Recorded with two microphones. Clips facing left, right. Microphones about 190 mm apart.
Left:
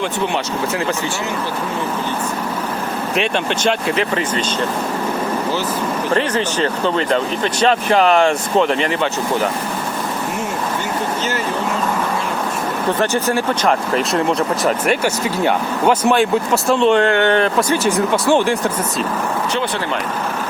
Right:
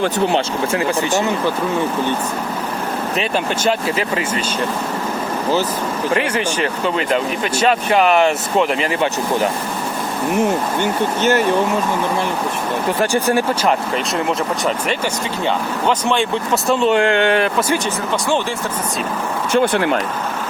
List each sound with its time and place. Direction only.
3.2 s speech: 5° right (ahead or behind)
6.1 s speech: 10° right (ahead or behind)
11.2 s speech: 65° right (ahead or behind)
13.0 s speech: 15° right (ahead or behind)
13.7 s speech: centre (ahead or behind)
16.6 s speech: 5° right (ahead or behind)
17.8 s speech: 10° left (ahead or behind)